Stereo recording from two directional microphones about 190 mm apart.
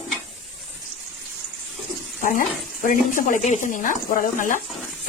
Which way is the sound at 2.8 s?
45° left (ahead or behind).